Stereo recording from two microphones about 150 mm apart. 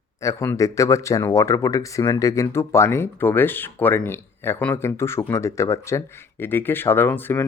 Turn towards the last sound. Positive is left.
turn(degrees=15)  # may be behind; listen again after turning